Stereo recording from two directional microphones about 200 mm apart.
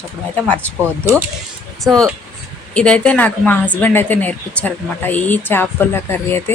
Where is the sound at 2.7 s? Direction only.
5° left (ahead or behind).